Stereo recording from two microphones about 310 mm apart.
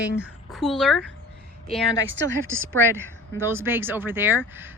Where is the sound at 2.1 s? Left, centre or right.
Right.